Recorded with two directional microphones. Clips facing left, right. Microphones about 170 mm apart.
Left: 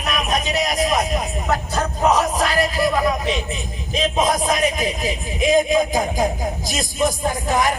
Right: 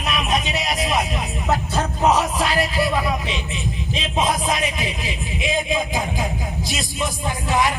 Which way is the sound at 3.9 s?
45° left (ahead or behind).